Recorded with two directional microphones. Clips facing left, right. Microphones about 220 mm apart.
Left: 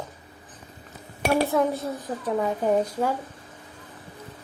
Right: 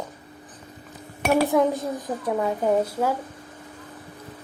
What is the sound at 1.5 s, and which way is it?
A woman's voice, 15° right (ahead or behind).